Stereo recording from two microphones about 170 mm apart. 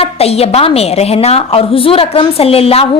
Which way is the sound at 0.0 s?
35° left (ahead or behind).